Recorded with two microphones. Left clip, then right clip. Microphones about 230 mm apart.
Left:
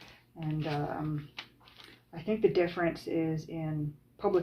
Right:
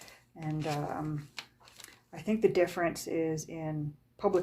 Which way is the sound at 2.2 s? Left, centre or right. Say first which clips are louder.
Even; right.